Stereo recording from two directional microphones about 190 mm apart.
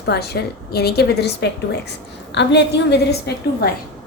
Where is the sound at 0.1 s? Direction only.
60° left (ahead or behind).